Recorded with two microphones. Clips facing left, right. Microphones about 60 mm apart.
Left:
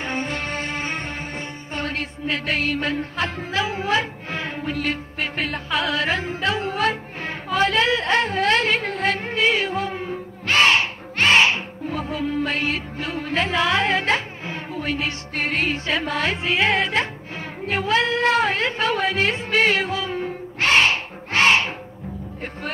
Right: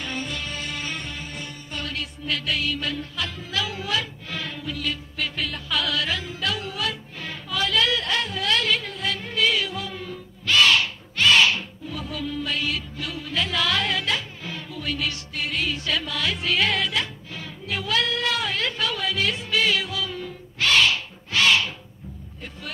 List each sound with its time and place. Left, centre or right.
0.0 s music: left